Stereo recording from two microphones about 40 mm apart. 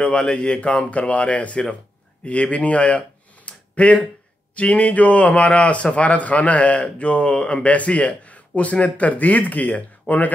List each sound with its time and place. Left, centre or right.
0.0 s a man's voice: left